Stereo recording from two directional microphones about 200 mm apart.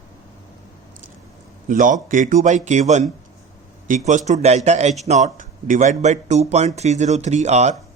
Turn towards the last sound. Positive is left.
turn(degrees=-35)  # may be behind; listen again after turning